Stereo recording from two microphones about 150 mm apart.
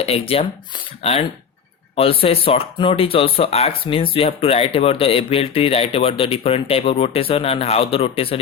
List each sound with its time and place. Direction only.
0.0 s speech: 40° left (ahead or behind)